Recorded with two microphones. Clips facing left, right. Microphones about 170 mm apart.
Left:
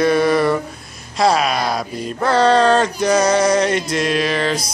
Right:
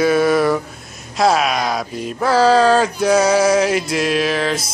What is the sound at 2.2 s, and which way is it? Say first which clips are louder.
Male singing: right 1 dB; 5° right (ahead or behind).